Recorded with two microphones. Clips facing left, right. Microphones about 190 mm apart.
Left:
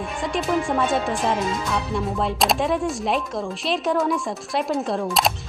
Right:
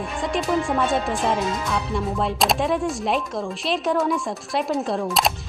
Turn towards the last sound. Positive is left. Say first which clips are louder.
# even
turn(degrees=0)  # may be behind; listen again after turning